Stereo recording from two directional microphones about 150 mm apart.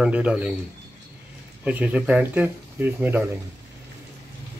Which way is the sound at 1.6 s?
10° right (ahead or behind).